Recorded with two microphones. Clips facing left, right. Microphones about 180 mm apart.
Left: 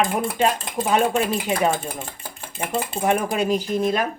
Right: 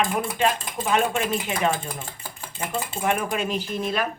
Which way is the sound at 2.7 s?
35° left (ahead or behind).